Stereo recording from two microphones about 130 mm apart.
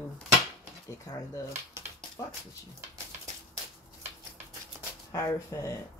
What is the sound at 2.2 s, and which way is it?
Speech, 20° left (ahead or behind).